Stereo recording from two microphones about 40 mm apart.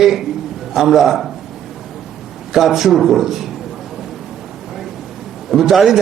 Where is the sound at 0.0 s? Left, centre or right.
Centre.